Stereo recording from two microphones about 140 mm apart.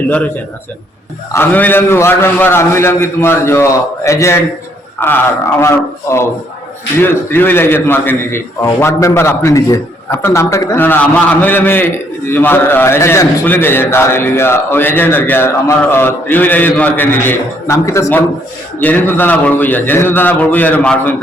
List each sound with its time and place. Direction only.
1.3 s a man's voice: 15° left (ahead or behind)